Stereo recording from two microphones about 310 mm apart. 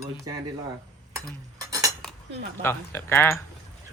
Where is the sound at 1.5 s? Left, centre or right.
Centre.